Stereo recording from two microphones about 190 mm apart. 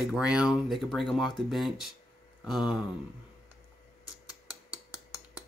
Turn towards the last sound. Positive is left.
turn(degrees=20)  # may be behind; listen again after turning